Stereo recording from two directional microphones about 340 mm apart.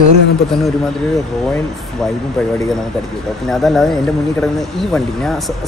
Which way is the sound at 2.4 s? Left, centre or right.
Centre.